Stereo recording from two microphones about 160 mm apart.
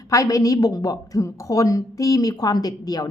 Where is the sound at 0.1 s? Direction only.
20° left (ahead or behind).